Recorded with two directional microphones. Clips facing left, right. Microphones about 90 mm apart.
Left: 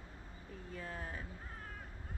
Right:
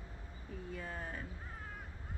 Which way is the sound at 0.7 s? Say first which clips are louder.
Right 1 dB; centre (ahead or behind).